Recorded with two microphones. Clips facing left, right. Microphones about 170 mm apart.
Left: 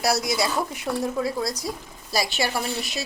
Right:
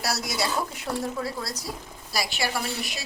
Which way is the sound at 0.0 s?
15° left (ahead or behind).